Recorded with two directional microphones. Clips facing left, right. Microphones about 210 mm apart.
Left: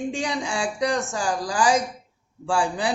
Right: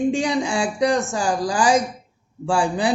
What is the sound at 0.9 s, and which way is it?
A man's voice, 25° right (ahead or behind).